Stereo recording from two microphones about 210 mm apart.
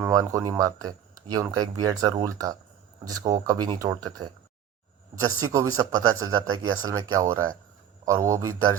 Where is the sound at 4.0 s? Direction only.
90° right.